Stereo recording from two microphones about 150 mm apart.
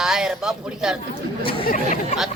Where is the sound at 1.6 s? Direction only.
65° left (ahead or behind).